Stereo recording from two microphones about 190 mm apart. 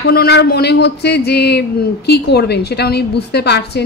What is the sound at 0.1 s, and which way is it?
A woman's voice, 55° left (ahead or behind).